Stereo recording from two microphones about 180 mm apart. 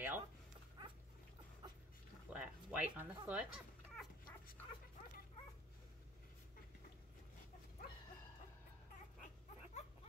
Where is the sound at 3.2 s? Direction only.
5° right (ahead or behind).